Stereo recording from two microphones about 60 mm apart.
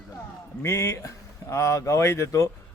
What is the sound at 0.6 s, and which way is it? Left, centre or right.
A man's voice, left.